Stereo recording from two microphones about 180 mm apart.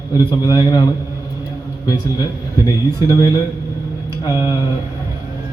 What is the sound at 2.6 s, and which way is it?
A man's voice, 20° left (ahead or behind).